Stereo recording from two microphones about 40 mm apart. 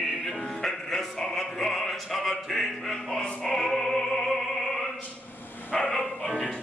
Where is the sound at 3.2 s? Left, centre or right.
Centre.